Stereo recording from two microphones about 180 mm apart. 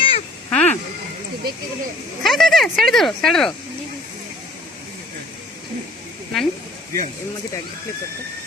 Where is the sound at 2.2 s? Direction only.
Centre (ahead or behind).